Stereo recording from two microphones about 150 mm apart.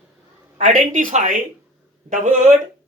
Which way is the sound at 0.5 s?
60° right (ahead or behind).